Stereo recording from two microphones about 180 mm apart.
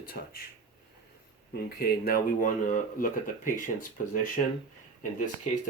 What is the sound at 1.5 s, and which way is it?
Speech, 55° left (ahead or behind).